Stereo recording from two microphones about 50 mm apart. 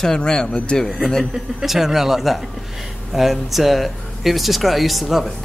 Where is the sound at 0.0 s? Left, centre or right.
Centre.